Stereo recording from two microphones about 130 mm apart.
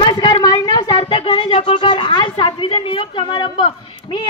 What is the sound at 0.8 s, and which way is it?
A woman's voice, 45° left (ahead or behind).